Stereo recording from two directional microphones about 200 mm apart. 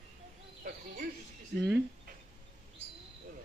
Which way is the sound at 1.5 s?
55° right (ahead or behind).